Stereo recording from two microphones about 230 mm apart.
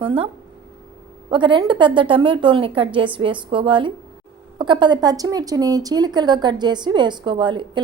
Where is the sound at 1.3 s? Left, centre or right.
Right.